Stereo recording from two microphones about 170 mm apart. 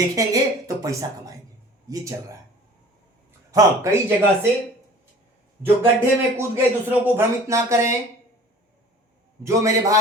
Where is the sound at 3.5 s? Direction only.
15° right (ahead or behind).